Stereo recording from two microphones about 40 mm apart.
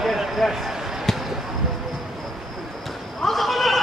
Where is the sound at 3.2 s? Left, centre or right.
Centre.